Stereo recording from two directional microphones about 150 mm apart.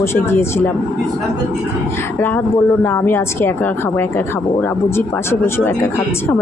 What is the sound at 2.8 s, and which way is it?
Speech, 15° left (ahead or behind).